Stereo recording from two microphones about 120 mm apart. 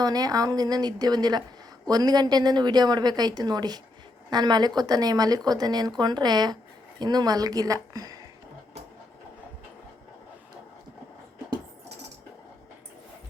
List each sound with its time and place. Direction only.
0.0 s a woman's voice: 30° right (ahead or behind)